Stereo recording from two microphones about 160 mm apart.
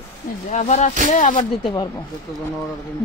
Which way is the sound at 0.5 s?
45° left (ahead or behind).